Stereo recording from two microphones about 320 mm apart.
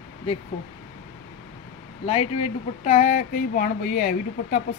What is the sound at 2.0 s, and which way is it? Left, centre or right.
Speech, centre.